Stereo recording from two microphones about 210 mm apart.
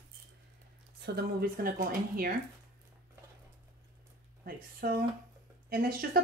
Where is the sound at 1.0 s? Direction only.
45° right (ahead or behind).